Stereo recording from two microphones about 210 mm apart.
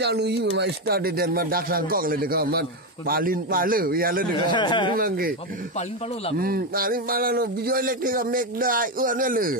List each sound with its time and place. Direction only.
0.0 s a man's voice: 50° right (ahead or behind)
4.4 s speech: 20° left (ahead or behind)
4.9 s a man's voice: 45° right (ahead or behind)
6.3 s a man's voice: 45° right (ahead or behind)